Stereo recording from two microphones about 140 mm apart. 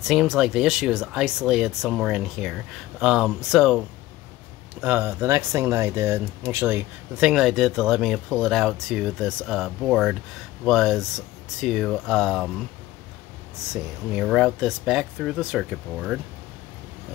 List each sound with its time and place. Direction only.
0.1 s speech: centre (ahead or behind)
4.7 s speech: 15° right (ahead or behind)
13.7 s speech: centre (ahead or behind)